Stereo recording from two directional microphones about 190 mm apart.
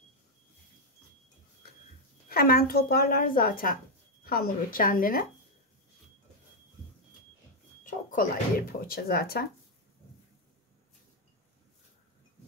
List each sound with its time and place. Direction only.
2.2 s speech: 50° left (ahead or behind)
7.8 s speech: 45° left (ahead or behind)